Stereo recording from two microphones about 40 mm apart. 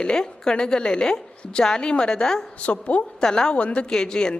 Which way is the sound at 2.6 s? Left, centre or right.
Left.